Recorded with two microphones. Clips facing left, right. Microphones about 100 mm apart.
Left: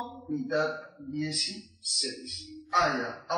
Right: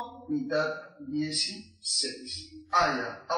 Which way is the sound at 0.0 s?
Centre (ahead or behind).